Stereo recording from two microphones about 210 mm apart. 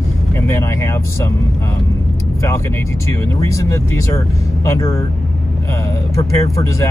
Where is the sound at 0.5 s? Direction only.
15° left (ahead or behind).